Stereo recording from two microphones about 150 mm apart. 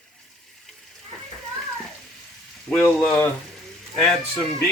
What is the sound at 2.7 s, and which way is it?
Speech, 15° left (ahead or behind).